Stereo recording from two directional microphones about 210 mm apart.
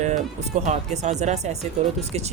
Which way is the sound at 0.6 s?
35° right (ahead or behind).